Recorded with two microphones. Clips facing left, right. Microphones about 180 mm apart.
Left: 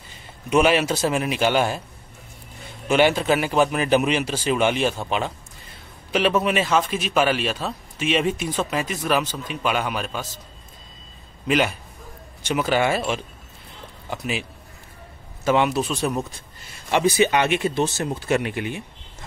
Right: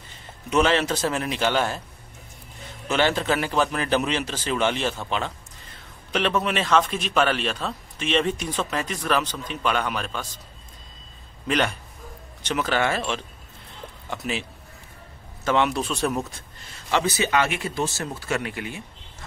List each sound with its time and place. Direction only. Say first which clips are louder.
0.5 s a man's voice: left 3 dB; 10° left (ahead or behind)
2.9 s a man's voice: left 4 dB; 15° left (ahead or behind)
11.4 s a man's voice: left 3 dB; 5° left (ahead or behind)
15.4 s speech: left 2 dB; 10° left (ahead or behind)
16.9 s speech: left 4 dB; 15° left (ahead or behind)